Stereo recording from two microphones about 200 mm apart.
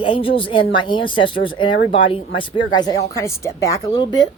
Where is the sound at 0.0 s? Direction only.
25° left (ahead or behind).